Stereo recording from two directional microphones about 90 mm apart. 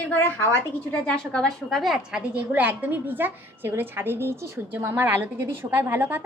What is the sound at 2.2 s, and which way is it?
A woman's voice, 15° right (ahead or behind).